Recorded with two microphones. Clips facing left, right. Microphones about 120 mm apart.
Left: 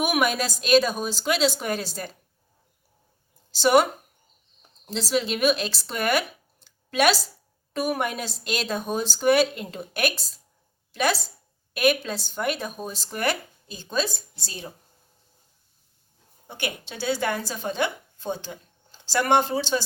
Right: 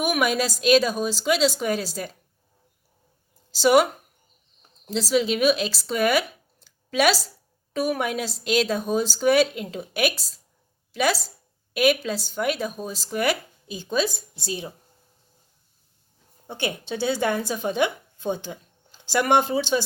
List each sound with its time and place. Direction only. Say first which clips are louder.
0.0 s speech: right 1 dB; centre (ahead or behind)
3.5 s speech: right 1 dB; 5° right (ahead or behind)
4.9 s speech: right 3 dB; 5° right (ahead or behind)
16.5 s a woman's voice: right 4 dB; 25° right (ahead or behind)